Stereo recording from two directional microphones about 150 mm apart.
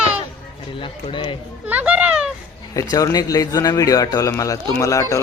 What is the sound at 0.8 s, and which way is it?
Speech, 35° left (ahead or behind).